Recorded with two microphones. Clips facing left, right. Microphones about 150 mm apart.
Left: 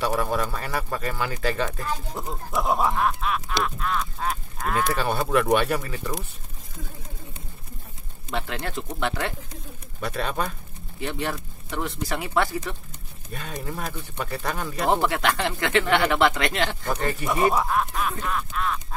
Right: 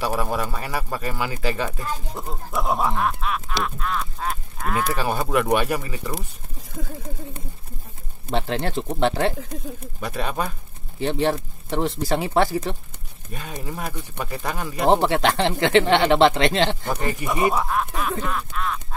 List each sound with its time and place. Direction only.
0.0 s speech: 10° right (ahead or behind)
8.3 s speech: 30° right (ahead or behind)
9.9 s speech: 10° right (ahead or behind)
11.0 s speech: 30° right (ahead or behind)
13.3 s speech: 5° right (ahead or behind)
14.9 s speech: 30° right (ahead or behind)
16.9 s speech: 10° right (ahead or behind)